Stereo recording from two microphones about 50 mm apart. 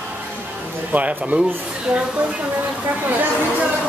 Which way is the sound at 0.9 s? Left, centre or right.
Right.